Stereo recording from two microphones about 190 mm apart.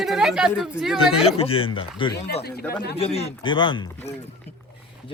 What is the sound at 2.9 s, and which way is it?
Speech, 30° left (ahead or behind).